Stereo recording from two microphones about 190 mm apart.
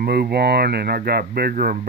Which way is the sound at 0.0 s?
55° right (ahead or behind).